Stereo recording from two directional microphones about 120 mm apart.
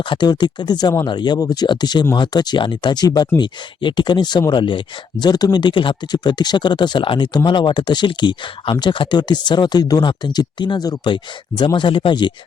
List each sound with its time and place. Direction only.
0.1 s speech: 40° left (ahead or behind)